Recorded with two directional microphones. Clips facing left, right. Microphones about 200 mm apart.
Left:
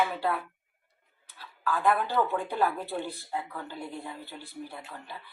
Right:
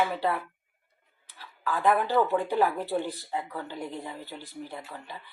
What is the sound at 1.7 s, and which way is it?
Speech, 15° right (ahead or behind).